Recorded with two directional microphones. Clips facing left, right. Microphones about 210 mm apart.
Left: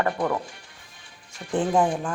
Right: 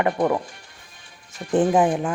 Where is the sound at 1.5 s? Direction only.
20° right (ahead or behind).